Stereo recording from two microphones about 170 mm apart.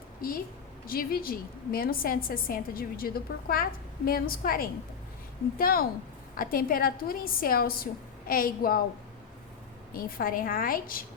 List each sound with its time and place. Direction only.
0.2 s a woman's voice: 60° left (ahead or behind)
9.9 s a woman's voice: 60° left (ahead or behind)